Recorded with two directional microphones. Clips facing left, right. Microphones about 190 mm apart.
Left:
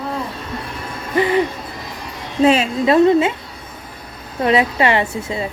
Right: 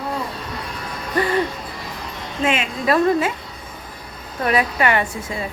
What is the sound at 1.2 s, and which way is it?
Hoot, 20° left (ahead or behind).